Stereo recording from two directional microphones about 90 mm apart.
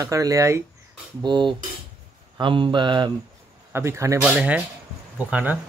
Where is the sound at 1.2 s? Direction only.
60° right (ahead or behind).